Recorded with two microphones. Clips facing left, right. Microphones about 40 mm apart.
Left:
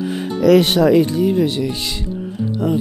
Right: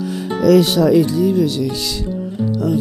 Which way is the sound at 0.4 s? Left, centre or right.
Left.